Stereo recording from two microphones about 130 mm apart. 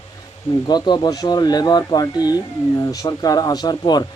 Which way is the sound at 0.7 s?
35° left (ahead or behind).